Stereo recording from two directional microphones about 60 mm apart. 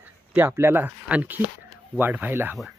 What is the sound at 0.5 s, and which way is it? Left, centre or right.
Speech, right.